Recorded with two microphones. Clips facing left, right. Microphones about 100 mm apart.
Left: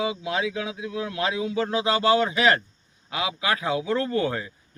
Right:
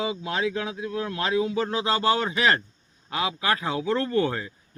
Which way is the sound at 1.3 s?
30° right (ahead or behind).